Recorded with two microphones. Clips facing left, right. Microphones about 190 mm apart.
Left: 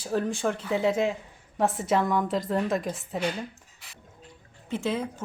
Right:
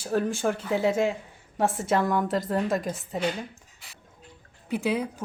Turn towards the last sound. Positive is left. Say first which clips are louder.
# right 2 dB
turn(degrees=-15)  # may be behind; listen again after turning